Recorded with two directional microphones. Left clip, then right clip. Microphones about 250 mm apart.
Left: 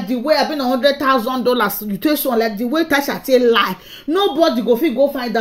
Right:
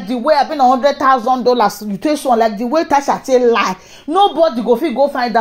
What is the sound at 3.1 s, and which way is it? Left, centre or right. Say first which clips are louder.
Speech: right 2 dB; centre.